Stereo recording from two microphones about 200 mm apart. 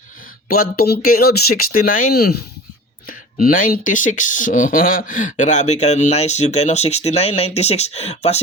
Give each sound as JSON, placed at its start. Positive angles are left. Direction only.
{"t": 0.4, "sound": "speech", "side_deg": 50}